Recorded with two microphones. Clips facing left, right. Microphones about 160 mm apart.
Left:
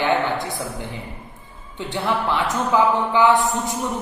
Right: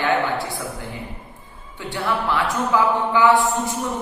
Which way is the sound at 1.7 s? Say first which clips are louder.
Left 1 dB; 20° left (ahead or behind).